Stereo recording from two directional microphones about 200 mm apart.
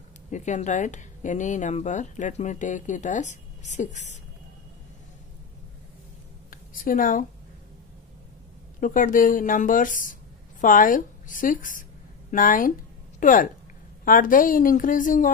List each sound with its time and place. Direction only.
0.3 s speech: 35° left (ahead or behind)
6.5 s speech: 45° left (ahead or behind)
8.7 s speech: 40° left (ahead or behind)